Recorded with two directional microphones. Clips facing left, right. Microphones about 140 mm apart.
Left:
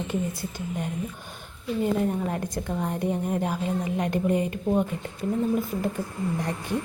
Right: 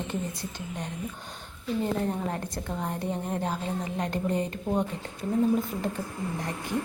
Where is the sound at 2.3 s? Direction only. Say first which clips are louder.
Left 4 dB; 10° left (ahead or behind).